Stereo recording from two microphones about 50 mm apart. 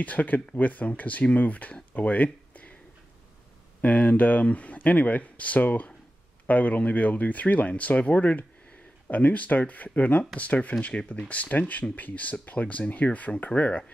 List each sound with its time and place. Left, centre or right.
0.0 s speech: left
2.0 s a sound: left
3.8 s speech: left